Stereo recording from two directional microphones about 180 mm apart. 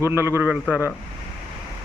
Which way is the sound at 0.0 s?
15° right (ahead or behind).